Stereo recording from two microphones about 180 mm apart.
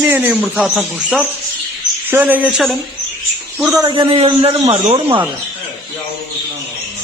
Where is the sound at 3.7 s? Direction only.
25° right (ahead or behind).